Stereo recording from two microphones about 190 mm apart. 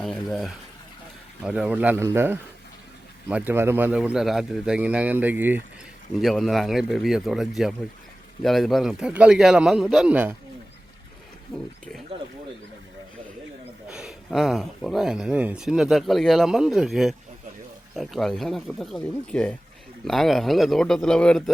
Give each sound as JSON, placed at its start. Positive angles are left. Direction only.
{"t": 0.0, "sound": "a man's voice", "side_deg": 0}
{"t": 13.9, "sound": "speech", "side_deg": 0}